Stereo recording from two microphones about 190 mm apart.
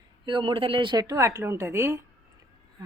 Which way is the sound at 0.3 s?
25° right (ahead or behind).